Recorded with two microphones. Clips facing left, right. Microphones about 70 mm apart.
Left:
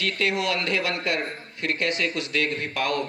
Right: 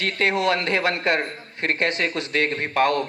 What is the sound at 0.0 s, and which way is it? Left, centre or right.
Speech, right.